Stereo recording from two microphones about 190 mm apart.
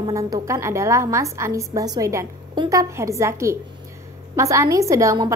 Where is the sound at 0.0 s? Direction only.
20° right (ahead or behind).